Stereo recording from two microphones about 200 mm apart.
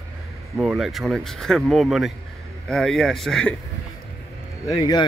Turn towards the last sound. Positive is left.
turn(degrees=20)  # may be behind; listen again after turning